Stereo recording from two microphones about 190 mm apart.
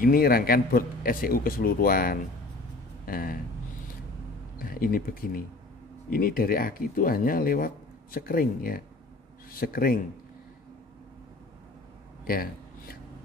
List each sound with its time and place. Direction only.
0.0 s speech: 50° left (ahead or behind)
4.6 s speech: 50° left (ahead or behind)